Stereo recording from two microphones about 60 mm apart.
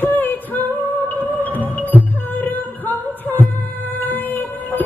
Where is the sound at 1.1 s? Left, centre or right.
Left.